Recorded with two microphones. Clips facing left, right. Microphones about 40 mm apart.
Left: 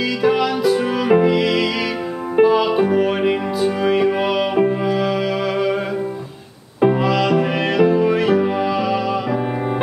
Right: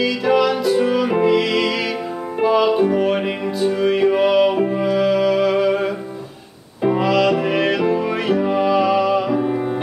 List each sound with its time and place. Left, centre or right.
0.0 s music: centre
6.9 s music: centre
9.4 s music: left